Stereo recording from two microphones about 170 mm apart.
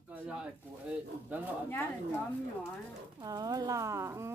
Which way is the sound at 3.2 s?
20° right (ahead or behind).